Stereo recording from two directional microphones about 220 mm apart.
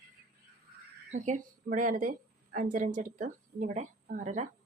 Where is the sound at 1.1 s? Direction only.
35° right (ahead or behind).